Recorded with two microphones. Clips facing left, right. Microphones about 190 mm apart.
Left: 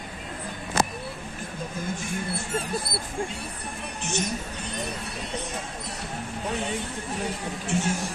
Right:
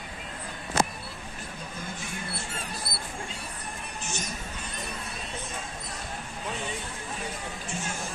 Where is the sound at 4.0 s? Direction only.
70° left (ahead or behind).